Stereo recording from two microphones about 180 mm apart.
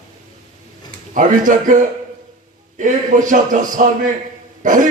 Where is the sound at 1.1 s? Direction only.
45° right (ahead or behind).